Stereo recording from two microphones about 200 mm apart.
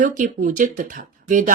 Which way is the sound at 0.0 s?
40° right (ahead or behind).